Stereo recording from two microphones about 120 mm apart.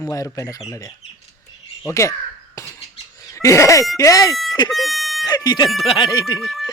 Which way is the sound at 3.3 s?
25° left (ahead or behind).